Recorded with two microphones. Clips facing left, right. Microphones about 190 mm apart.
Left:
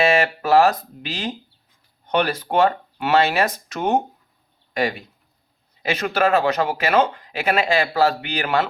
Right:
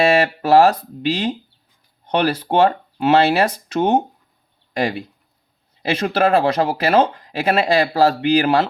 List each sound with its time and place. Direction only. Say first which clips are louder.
0.0 s speech: right 3 dB; 35° right (ahead or behind)